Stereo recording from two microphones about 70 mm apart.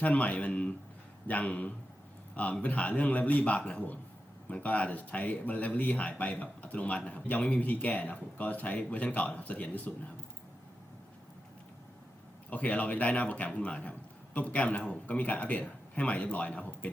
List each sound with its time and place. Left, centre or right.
0.0 s speech: left
12.5 s speech: left